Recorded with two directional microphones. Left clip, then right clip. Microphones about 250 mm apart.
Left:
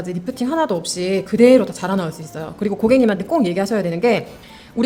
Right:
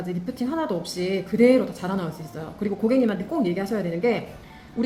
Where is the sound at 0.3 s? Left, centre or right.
Left.